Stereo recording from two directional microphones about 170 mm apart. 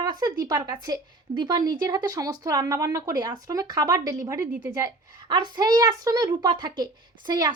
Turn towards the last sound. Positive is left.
turn(degrees=-25)  # may be behind; listen again after turning